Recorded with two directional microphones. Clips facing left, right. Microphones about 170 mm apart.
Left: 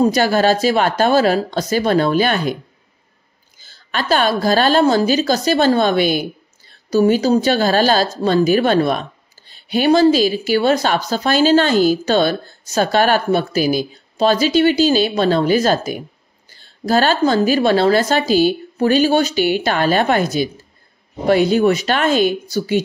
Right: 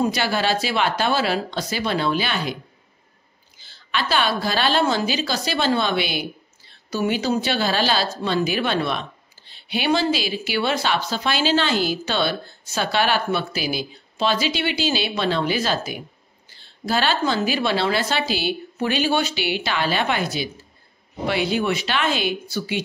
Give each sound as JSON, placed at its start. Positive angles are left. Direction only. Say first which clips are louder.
{"t": 0.0, "sound": "a woman's voice", "louder": "left 8 dB", "side_deg": 45}
{"t": 3.5, "sound": "a woman's voice", "louder": "left 3 dB", "side_deg": 45}